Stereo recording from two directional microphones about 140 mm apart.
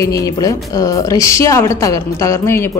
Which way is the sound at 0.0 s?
25° left (ahead or behind).